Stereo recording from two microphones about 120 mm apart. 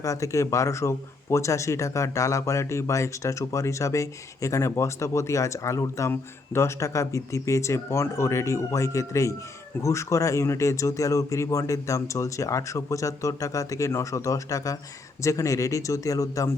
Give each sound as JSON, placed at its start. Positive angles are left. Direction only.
{"t": 0.0, "sound": "speech", "side_deg": 25}